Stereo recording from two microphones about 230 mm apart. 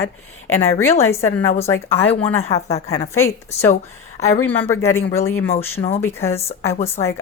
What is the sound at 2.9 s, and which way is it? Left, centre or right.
Speech, centre.